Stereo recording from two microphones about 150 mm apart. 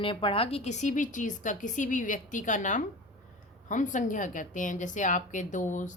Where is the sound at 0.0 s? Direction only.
35° left (ahead or behind).